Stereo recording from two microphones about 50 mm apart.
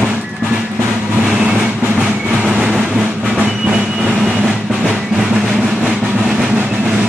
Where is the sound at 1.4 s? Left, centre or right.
Right; by 4.7 s centre.